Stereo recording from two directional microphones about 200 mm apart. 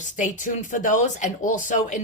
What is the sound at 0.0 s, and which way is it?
Speech, 40° left (ahead or behind).